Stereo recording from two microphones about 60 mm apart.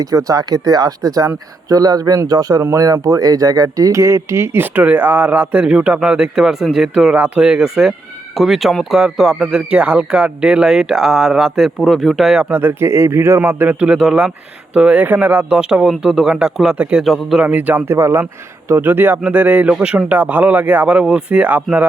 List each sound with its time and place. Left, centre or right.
0.0 s speech: right
2.6 s speech: right
4.6 s speech: right; by 12.4 s centre
12.5 s speech: right
12.9 s speech: right
13.7 s speech: centre
15.0 s speech: right; by 16.3 s centre
16.7 s speech: right
17.0 s speech: centre
17.4 s speech: right
17.8 s speech: right
20.9 s speech: centre